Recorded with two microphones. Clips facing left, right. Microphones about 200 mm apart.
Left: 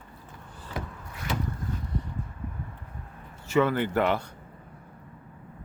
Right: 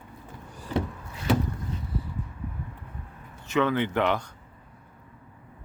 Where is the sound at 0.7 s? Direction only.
25° right (ahead or behind).